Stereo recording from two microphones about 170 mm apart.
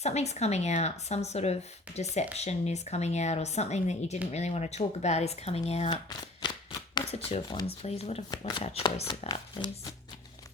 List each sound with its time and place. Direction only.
0.0 s speech: 40° left (ahead or behind)
6.4 s shuffling cards: 25° left (ahead or behind)
7.4 s speech: 25° left (ahead or behind)
7.9 s speech: 40° left (ahead or behind)
8.3 s speech: 25° left (ahead or behind)
9.0 s speech: 40° left (ahead or behind)